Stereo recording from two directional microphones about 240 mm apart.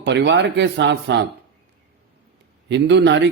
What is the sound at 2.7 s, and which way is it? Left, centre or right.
Speech, right.